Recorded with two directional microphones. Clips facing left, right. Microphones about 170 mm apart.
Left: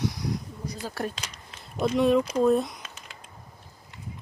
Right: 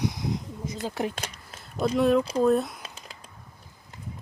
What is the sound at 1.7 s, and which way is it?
Speech, centre (ahead or behind).